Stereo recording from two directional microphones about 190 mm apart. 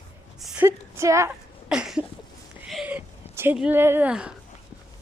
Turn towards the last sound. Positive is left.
turn(degrees=-5)  # may be behind; listen again after turning